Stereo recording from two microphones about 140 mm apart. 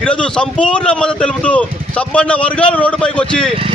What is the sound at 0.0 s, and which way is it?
A man's voice, 5° left (ahead or behind).